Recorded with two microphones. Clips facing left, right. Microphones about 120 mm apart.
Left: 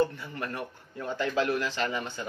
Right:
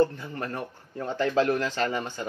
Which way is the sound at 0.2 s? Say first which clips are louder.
Right 2 dB; 35° right (ahead or behind).